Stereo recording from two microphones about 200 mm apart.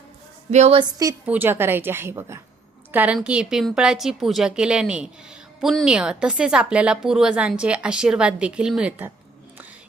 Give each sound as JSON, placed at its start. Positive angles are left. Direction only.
{"t": 0.5, "sound": "a woman's voice", "side_deg": -30}
{"t": 1.2, "sound": "a woman's voice", "side_deg": -10}